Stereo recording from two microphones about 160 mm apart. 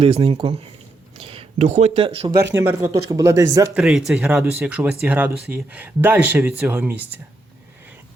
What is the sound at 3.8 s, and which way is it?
Speech, centre (ahead or behind).